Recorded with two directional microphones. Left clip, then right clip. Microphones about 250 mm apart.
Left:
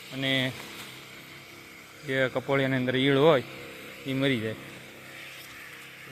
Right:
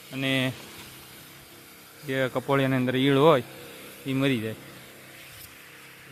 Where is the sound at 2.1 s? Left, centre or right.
Centre.